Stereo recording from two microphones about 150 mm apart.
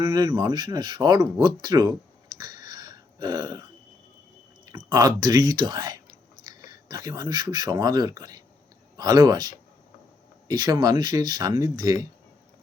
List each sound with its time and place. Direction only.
0.0 s speech: 20° right (ahead or behind)
2.4 s throat clearing: 25° right (ahead or behind)
4.6 s speech: 25° right (ahead or behind)
10.5 s speech: 25° right (ahead or behind)